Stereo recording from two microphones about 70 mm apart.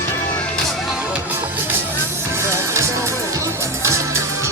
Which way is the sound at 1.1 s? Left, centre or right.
Right.